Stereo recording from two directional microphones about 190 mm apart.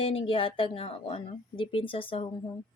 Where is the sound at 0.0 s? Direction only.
30° left (ahead or behind).